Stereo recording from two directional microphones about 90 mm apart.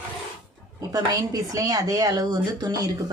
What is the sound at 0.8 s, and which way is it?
A woman's voice, 45° right (ahead or behind).